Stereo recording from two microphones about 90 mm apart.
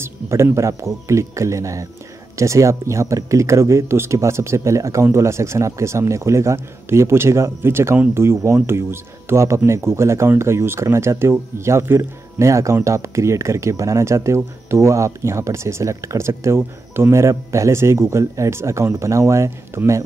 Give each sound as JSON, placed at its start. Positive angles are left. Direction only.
{"t": 0.0, "sound": "speech", "side_deg": -30}